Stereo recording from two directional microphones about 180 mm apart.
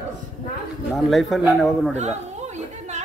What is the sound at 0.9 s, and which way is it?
Speech, centre (ahead or behind).